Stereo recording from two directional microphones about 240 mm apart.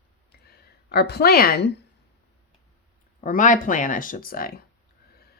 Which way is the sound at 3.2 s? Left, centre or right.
Left.